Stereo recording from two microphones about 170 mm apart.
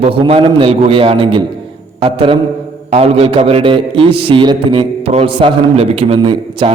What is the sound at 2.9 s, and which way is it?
A man's voice, 35° right (ahead or behind).